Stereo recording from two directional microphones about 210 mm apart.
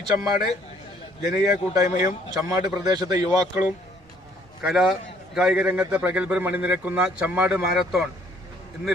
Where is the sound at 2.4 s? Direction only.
15° right (ahead or behind).